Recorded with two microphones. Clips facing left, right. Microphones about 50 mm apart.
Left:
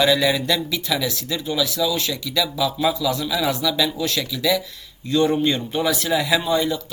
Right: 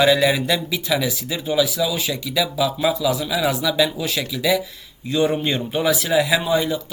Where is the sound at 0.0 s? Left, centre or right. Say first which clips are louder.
Right 2 dB; centre.